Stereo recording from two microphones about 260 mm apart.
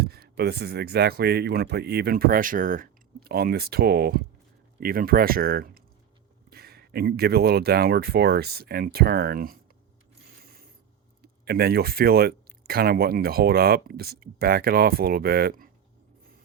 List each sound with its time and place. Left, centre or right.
0.0 s speech: right
11.2 s speech: right